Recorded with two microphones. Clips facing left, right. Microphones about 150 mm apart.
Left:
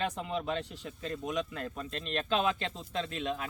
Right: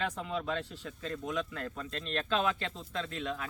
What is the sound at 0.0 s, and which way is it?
Speech, 20° left (ahead or behind).